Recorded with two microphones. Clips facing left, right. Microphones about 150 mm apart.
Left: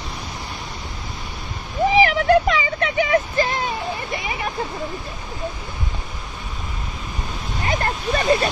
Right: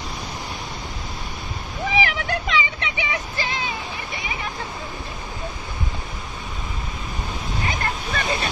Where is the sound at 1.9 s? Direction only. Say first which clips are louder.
Left 9 dB; 35° left (ahead or behind).